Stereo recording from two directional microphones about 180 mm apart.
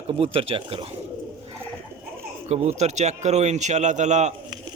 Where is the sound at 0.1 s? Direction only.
30° right (ahead or behind).